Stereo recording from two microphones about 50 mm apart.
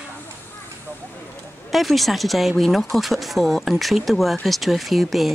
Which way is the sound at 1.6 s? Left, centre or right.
Centre.